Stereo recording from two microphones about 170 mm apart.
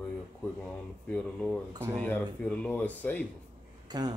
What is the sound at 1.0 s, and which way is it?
Speech, 5° left (ahead or behind).